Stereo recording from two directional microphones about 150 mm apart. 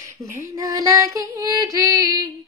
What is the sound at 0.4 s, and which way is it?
Female singing, 25° right (ahead or behind).